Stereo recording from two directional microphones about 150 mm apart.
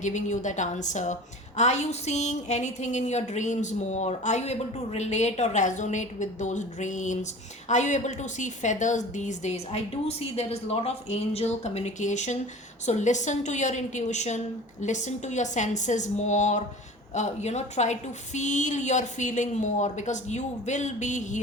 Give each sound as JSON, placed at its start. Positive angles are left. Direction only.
{"t": 0.0, "sound": "a woman's voice", "side_deg": 55}